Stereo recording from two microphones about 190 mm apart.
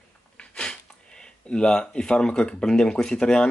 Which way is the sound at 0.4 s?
5° left (ahead or behind).